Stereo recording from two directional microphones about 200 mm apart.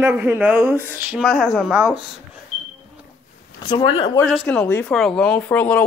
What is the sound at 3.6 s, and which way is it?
Speech, 25° left (ahead or behind).